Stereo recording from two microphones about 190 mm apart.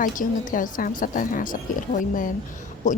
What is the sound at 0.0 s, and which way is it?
A woman's voice, 45° left (ahead or behind).